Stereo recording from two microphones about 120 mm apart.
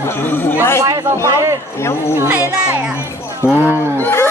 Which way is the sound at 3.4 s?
20° left (ahead or behind).